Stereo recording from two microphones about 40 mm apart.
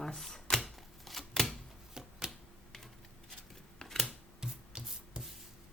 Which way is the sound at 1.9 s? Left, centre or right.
Centre.